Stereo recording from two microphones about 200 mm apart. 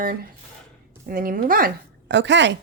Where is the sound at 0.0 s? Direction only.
45° right (ahead or behind).